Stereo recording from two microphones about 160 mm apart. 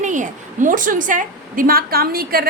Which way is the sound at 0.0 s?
50° right (ahead or behind).